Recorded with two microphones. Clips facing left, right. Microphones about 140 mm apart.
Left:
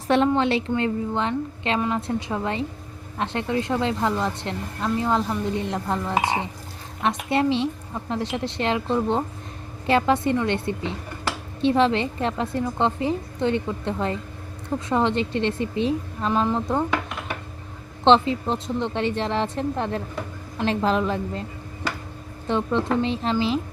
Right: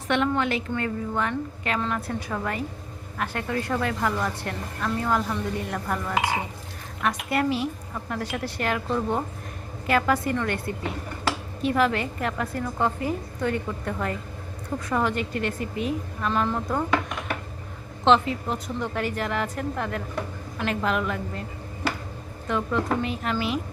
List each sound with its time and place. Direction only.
0.1 s a woman's voice: 30° left (ahead or behind)
18.0 s a woman's voice: 30° left (ahead or behind)
22.4 s a woman's voice: 30° left (ahead or behind)